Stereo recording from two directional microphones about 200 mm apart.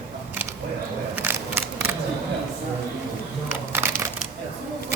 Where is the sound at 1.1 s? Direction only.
10° right (ahead or behind).